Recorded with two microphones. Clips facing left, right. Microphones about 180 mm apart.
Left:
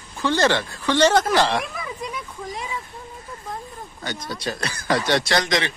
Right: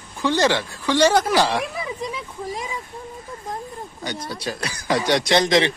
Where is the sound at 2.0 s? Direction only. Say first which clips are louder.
Right 2 dB; 35° right (ahead or behind).